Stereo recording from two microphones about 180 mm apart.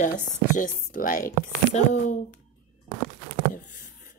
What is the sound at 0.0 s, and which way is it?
Speech, 45° left (ahead or behind).